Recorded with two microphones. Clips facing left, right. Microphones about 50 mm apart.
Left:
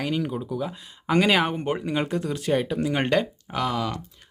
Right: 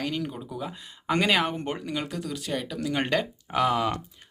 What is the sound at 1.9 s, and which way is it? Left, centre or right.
Speech, left.